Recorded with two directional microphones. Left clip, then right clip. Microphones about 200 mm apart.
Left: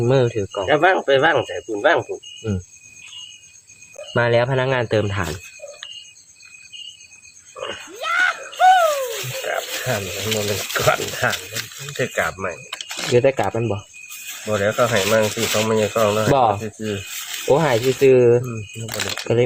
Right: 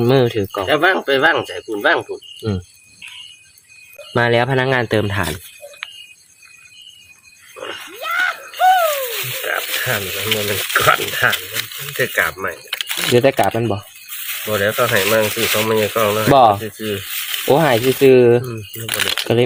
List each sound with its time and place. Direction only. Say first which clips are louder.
0.0 s speech: right 3 dB; 35° right (ahead or behind)
0.6 s speech: even; 15° right (ahead or behind)
4.1 s speech: right 2 dB; 35° right (ahead or behind)
7.9 s a sound: even; centre (ahead or behind)
9.0 s speech: right 2 dB; 20° right (ahead or behind)
12.9 s a sound: right 5 dB; centre (ahead or behind)
13.1 s speech: right 3 dB; 45° right (ahead or behind); by 15.3 s 30° right (ahead or behind)
15.3 s speech: right 3 dB; 15° right (ahead or behind)
16.3 s speech: right 8 dB; 40° right (ahead or behind)
16.6 s speech: right 3 dB; 20° right (ahead or behind)
17.5 s speech: right 3 dB; 45° right (ahead or behind)
18.9 s speech: right 7 dB; centre (ahead or behind)